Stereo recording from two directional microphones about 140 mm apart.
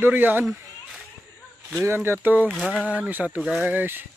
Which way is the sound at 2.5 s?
Centre (ahead or behind).